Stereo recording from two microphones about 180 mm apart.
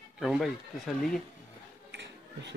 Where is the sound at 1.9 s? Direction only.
70° right (ahead or behind).